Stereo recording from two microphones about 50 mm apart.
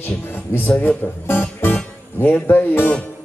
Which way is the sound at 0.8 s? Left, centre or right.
Left.